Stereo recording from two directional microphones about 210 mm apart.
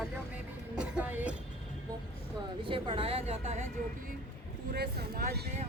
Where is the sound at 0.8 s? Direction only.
5° right (ahead or behind).